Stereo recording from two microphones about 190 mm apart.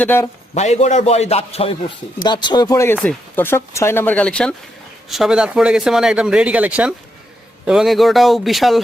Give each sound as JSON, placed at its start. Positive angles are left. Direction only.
{"t": 0.0, "sound": "speech", "side_deg": 10}
{"t": 0.5, "sound": "a man's voice", "side_deg": 35}